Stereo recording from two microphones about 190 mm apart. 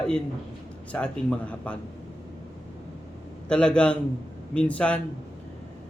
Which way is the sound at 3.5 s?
5° left (ahead or behind).